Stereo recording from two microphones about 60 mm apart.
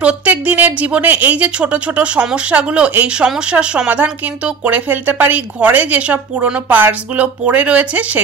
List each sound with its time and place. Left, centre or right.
0.0 s speech: right